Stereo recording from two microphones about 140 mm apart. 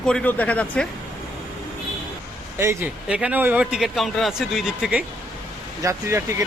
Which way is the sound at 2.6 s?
20° right (ahead or behind).